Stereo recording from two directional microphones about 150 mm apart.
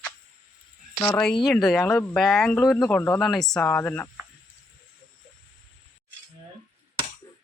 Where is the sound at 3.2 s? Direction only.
Centre (ahead or behind).